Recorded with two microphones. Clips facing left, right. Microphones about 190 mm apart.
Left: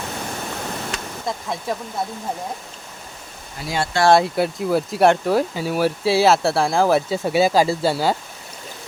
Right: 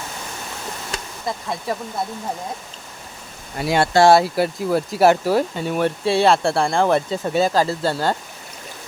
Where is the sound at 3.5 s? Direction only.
60° right (ahead or behind).